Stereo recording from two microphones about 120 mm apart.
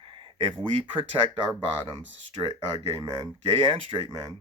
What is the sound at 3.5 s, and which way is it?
Speech, 45° right (ahead or behind).